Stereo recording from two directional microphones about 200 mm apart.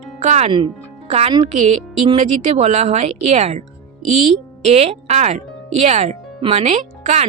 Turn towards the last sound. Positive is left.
turn(degrees=-35)  # may be behind; listen again after turning